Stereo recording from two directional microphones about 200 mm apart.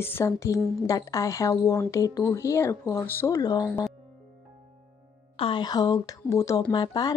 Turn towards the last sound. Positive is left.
turn(degrees=20)  # may be behind; listen again after turning